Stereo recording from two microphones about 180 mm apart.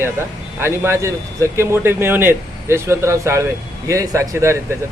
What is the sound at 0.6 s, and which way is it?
A man's voice, 15° right (ahead or behind).